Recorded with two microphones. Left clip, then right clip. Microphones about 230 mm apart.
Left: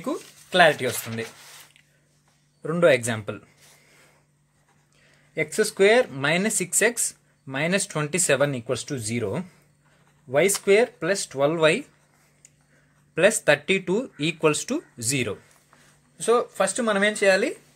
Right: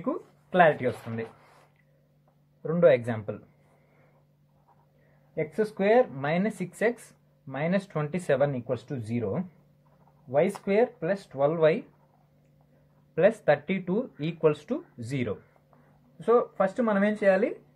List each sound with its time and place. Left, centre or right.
0.0 s speech: left
2.6 s speech: left
5.3 s speech: left
13.1 s speech: left